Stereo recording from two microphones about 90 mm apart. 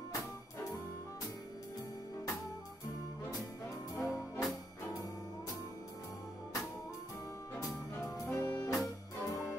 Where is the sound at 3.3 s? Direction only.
35° left (ahead or behind).